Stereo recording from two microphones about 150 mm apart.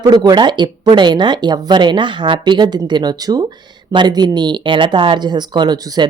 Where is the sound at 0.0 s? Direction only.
25° right (ahead or behind).